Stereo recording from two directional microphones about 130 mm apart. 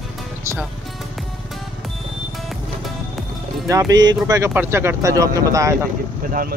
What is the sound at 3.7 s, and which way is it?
Speech, 25° right (ahead or behind).